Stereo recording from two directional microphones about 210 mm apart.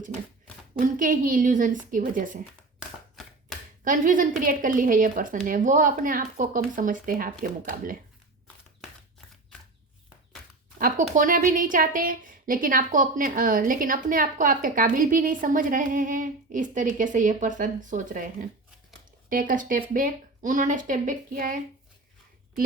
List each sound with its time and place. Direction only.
0.8 s a woman's voice: 40° right (ahead or behind)
3.2 s a sound: centre (ahead or behind)
3.8 s a woman's voice: 40° right (ahead or behind)
10.8 s a woman's voice: 40° right (ahead or behind)
19.3 s a woman's voice: 40° right (ahead or behind)